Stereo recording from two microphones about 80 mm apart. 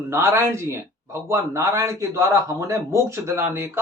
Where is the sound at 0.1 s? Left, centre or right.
Right.